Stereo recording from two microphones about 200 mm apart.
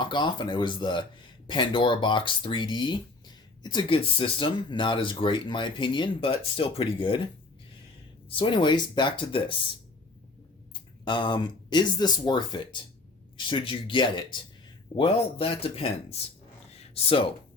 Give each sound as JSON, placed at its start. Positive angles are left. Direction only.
{"t": 0.0, "sound": "speech", "side_deg": 20}
{"t": 8.4, "sound": "speech", "side_deg": 25}
{"t": 11.0, "sound": "speech", "side_deg": 20}
{"t": 16.7, "sound": "a sound", "side_deg": 30}